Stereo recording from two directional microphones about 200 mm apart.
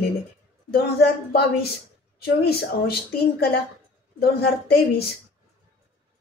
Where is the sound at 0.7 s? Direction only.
55° left (ahead or behind).